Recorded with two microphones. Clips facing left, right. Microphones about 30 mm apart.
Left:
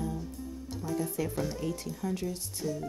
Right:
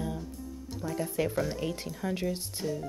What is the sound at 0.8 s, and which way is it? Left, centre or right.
Speech, right.